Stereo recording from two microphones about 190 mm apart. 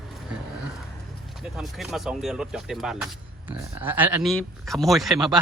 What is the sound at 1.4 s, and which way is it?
Speech, centre (ahead or behind).